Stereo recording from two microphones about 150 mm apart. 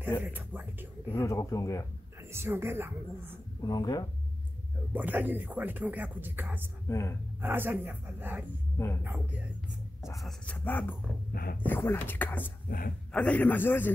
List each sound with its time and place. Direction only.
0.2 s speech: 10° right (ahead or behind)
1.1 s speech: 20° left (ahead or behind)
2.3 s speech: 15° right (ahead or behind)
3.6 s speech: 25° left (ahead or behind)
4.9 s speech: 10° right (ahead or behind)
6.9 s speech: 20° left (ahead or behind)
7.4 s speech: 15° right (ahead or behind)
10.1 s speech: 5° left (ahead or behind)
11.3 s speech: 80° left
11.6 s speech: 15° left (ahead or behind)
12.6 s speech: 70° left (ahead or behind)
13.1 s speech: 10° left (ahead or behind)